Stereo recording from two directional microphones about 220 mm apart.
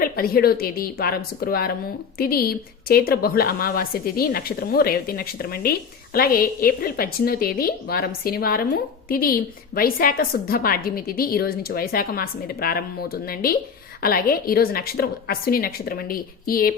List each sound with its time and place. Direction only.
0.0 s a woman's voice: 40° left (ahead or behind)